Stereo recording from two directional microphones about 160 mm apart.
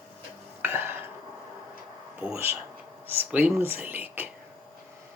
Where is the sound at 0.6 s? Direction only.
15° right (ahead or behind).